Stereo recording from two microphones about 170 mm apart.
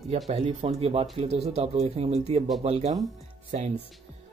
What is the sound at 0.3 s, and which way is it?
Speech, 30° right (ahead or behind).